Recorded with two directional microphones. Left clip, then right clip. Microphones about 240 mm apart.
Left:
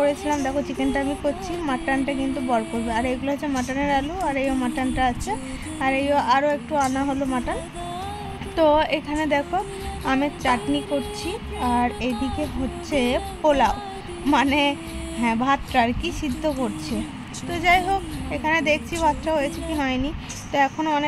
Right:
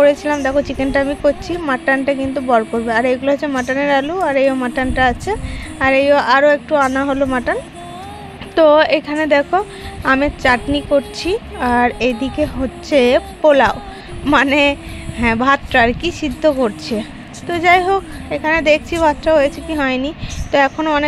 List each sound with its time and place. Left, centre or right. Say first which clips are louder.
0.0 s speech: right 9 dB; centre
8.5 s speech: right 9 dB; centre